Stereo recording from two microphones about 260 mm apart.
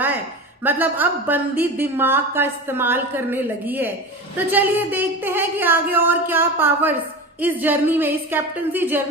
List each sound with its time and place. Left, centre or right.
0.6 s speech: centre